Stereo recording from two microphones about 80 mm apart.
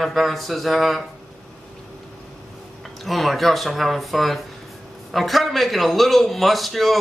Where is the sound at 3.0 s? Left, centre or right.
Centre.